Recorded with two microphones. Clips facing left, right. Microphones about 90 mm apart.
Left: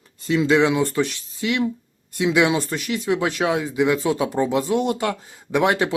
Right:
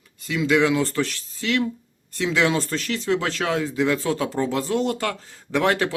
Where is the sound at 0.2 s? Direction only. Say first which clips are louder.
Left 3 dB; 30° left (ahead or behind).